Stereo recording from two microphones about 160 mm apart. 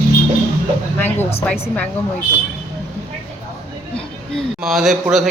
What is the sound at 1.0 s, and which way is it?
Speech, 15° left (ahead or behind).